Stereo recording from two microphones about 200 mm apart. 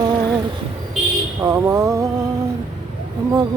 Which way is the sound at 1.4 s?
15° right (ahead or behind).